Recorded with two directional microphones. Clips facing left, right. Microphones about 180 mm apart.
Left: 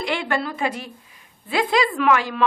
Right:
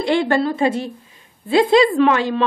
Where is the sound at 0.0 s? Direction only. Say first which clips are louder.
Right 7 dB; 30° right (ahead or behind).